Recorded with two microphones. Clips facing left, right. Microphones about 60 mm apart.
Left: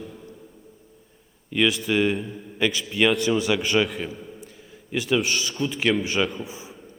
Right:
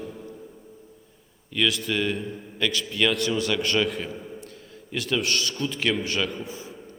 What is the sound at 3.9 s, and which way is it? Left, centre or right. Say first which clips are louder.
Speech: right 1 dB; centre.